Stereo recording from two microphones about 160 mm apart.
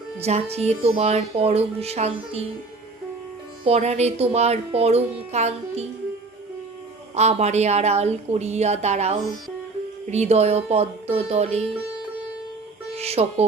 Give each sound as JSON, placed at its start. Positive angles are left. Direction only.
{"t": 0.2, "sound": "speech", "side_deg": -40}
{"t": 3.6, "sound": "speech", "side_deg": -40}
{"t": 7.1, "sound": "speech", "side_deg": -45}
{"t": 13.0, "sound": "speech", "side_deg": -40}